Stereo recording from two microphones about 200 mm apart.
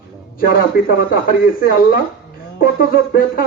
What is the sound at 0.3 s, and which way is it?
Speech, 45° left (ahead or behind).